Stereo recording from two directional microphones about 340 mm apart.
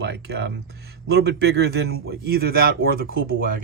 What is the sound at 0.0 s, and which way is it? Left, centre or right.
Speech, right.